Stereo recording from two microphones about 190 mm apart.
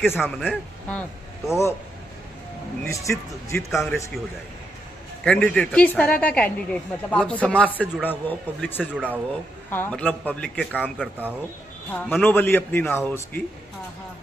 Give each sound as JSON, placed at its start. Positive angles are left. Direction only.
{"t": 0.2, "sound": "speech", "side_deg": 5}
{"t": 2.9, "sound": "a woman's voice", "side_deg": 15}
{"t": 5.2, "sound": "a woman's voice", "side_deg": 5}
{"t": 8.9, "sound": "speech", "side_deg": -10}
{"t": 9.7, "sound": "a woman's voice", "side_deg": 10}
{"t": 11.0, "sound": "speech", "side_deg": -10}
{"t": 11.9, "sound": "a woman's voice", "side_deg": 10}